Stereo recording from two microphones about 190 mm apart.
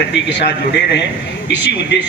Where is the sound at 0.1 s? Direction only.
65° left (ahead or behind).